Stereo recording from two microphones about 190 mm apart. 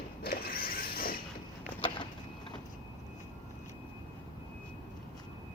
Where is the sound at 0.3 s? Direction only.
50° left (ahead or behind).